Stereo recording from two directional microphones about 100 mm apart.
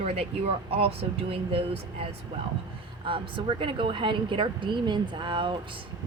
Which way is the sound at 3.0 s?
55° right (ahead or behind).